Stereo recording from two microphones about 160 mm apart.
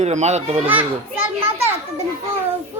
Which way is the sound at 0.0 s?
45° right (ahead or behind).